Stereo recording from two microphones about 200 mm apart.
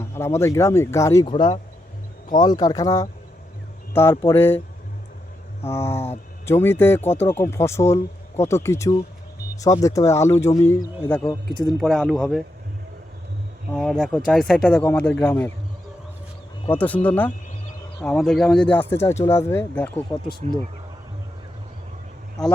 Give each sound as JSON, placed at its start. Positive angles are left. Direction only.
{"t": 0.0, "sound": "speech", "side_deg": 15}
{"t": 5.6, "sound": "speech", "side_deg": 10}
{"t": 11.6, "sound": "speech", "side_deg": 0}
{"t": 13.7, "sound": "speech", "side_deg": 0}
{"t": 16.7, "sound": "speech", "side_deg": 10}
{"t": 20.1, "sound": "speech", "side_deg": 20}